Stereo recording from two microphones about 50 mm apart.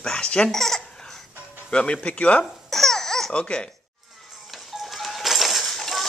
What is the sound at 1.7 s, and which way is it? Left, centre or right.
Speech, left.